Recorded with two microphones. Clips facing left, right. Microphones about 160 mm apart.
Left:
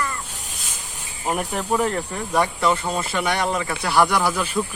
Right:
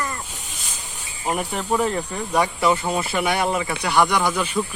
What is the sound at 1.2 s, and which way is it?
Speech, centre (ahead or behind).